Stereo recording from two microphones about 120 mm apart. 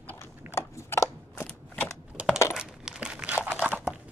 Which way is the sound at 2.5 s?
5° right (ahead or behind).